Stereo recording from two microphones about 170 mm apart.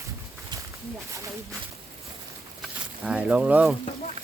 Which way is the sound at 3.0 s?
5° right (ahead or behind).